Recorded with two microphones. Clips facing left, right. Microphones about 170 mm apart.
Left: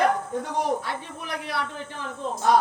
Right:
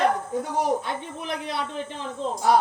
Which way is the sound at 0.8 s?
20° right (ahead or behind).